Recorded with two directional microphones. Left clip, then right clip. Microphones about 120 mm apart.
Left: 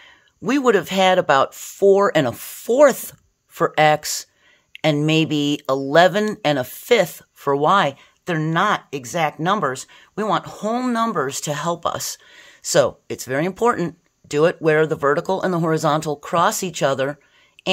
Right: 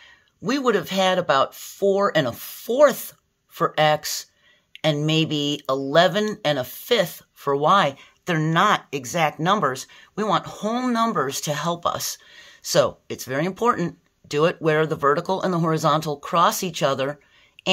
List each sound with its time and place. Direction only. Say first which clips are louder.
0.0 s speech: left 3 dB; 50° left (ahead or behind); by 17.6 s 30° left (ahead or behind)